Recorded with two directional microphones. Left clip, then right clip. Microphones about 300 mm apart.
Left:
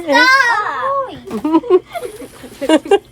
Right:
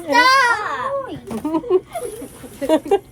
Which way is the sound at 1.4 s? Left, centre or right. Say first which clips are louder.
Left 6 dB; left.